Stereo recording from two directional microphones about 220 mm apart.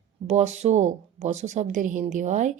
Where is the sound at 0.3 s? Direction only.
30° right (ahead or behind).